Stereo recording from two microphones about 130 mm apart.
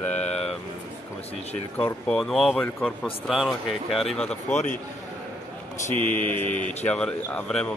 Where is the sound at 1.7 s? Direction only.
10° left (ahead or behind).